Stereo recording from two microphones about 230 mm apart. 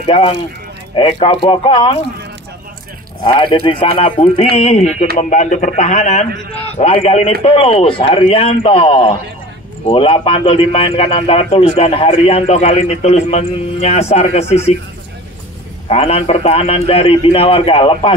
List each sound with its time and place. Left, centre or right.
0.0 s a man's voice: left
3.3 s a man's voice: left
15.9 s a man's voice: left